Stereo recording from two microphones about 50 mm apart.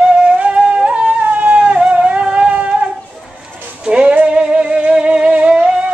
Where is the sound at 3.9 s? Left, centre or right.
Right.